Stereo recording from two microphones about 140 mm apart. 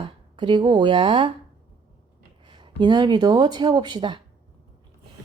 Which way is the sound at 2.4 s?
35° right (ahead or behind).